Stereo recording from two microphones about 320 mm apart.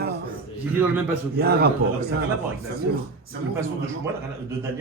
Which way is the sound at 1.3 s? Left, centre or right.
Right.